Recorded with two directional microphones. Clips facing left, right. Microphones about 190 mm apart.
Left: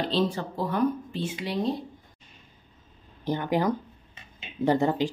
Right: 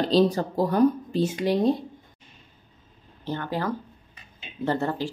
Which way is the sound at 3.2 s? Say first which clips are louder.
Left 3 dB; 15° left (ahead or behind).